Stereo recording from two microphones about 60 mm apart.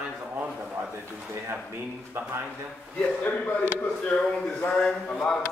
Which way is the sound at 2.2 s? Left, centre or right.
Right.